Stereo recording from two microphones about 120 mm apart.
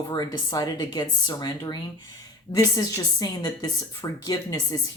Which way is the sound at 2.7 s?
30° left (ahead or behind).